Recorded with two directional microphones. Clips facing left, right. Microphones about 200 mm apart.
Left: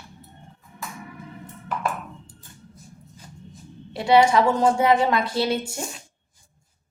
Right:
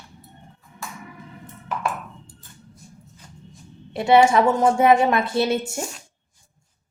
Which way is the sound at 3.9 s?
25° right (ahead or behind).